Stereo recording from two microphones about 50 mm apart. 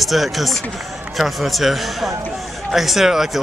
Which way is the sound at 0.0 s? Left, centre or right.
Centre.